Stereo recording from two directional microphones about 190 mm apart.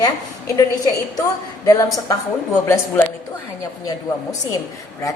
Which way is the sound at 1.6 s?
20° left (ahead or behind).